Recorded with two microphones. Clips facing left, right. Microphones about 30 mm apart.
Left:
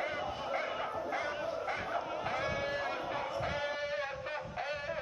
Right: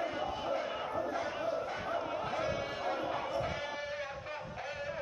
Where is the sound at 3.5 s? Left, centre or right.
Centre.